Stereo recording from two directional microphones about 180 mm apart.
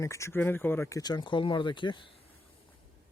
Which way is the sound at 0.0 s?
15° left (ahead or behind).